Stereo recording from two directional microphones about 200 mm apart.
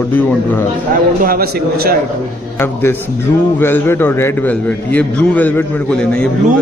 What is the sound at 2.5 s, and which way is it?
A man's voice, 10° left (ahead or behind).